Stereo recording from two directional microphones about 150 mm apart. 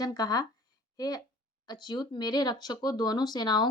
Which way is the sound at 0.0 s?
25° left (ahead or behind).